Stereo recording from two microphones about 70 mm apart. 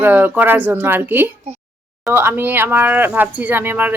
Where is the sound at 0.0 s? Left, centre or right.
Right.